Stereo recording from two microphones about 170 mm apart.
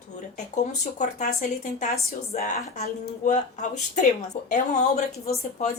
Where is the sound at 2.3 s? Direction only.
50° left (ahead or behind).